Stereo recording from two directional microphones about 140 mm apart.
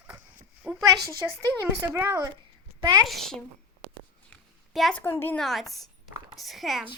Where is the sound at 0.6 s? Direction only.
5° right (ahead or behind).